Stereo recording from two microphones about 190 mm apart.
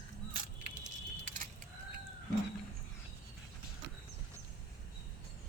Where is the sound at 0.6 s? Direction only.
40° right (ahead or behind).